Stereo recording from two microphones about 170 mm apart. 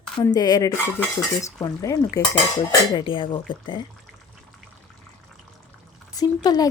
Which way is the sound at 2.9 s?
30° left (ahead or behind).